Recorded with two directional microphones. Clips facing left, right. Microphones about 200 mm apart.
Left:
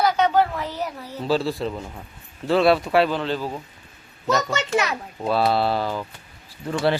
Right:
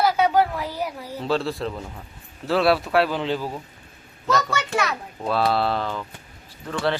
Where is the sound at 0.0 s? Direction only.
5° right (ahead or behind).